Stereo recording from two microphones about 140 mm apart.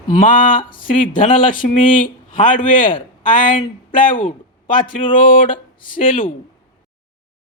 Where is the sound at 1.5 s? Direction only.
75° left (ahead or behind).